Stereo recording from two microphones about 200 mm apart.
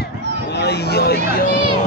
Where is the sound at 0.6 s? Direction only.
55° left (ahead or behind).